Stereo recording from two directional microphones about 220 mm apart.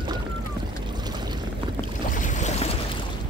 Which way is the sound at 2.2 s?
35° left (ahead or behind).